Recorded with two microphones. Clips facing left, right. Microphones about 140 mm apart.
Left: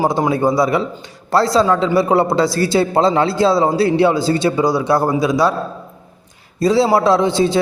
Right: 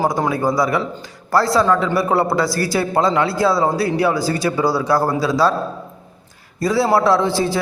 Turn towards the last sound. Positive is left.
turn(degrees=20)  # may be behind; listen again after turning